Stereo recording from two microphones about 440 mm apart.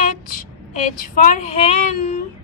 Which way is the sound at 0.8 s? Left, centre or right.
Centre.